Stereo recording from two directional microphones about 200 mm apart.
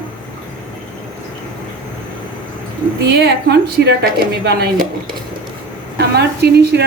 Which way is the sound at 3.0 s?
55° right (ahead or behind).